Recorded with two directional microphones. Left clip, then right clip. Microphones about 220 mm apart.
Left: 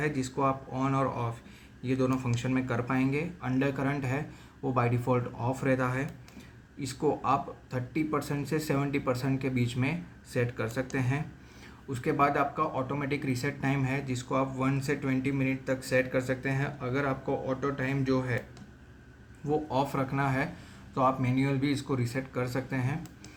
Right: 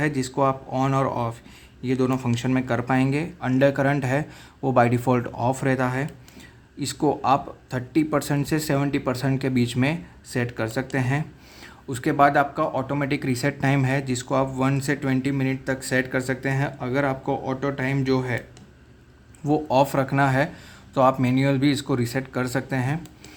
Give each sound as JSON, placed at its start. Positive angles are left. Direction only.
{"t": 0.0, "sound": "speech", "side_deg": -40}
{"t": 19.5, "sound": "speech", "side_deg": -45}